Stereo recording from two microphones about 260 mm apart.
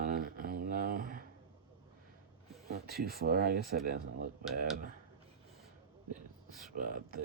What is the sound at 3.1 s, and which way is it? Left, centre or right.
Speech, right.